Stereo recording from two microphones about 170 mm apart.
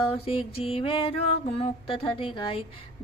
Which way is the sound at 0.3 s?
35° left (ahead or behind).